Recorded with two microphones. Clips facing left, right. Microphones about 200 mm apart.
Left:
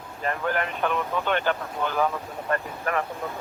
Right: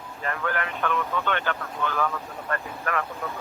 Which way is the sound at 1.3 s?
35° left (ahead or behind).